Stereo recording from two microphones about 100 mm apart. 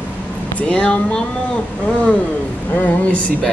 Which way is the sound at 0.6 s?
10° left (ahead or behind).